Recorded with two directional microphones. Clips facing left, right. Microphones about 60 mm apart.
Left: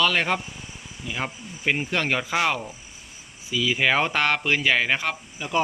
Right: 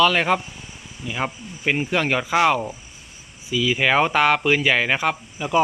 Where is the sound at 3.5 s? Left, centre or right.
Centre.